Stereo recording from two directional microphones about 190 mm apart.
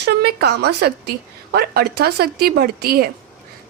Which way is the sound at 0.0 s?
55° right (ahead or behind).